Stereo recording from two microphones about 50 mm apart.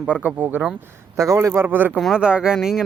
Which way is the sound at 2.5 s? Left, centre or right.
Centre.